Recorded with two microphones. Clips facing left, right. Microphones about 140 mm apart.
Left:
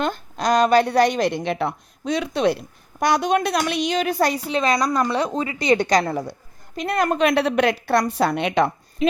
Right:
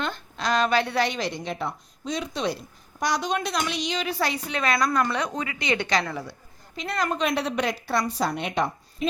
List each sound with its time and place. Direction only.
0.0 s a woman's voice: 45° left (ahead or behind)
4.4 s a woman's voice: 30° left (ahead or behind); by 8.7 s 80° left